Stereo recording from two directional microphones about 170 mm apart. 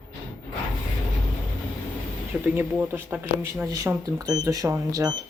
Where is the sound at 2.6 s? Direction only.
10° right (ahead or behind).